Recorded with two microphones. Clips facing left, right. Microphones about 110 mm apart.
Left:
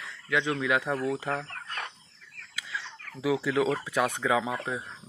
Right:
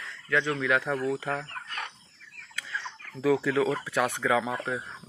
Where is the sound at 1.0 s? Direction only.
20° left (ahead or behind).